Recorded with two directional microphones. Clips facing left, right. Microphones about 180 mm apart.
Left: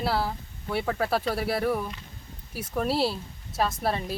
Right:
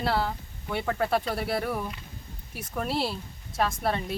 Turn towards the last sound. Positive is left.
turn(degrees=5)  # may be behind; listen again after turning